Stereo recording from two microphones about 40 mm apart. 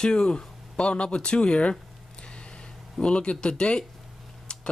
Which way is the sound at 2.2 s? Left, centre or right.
Left.